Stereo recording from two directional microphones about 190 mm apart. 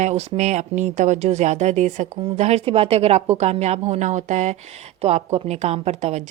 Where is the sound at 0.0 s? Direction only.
35° right (ahead or behind).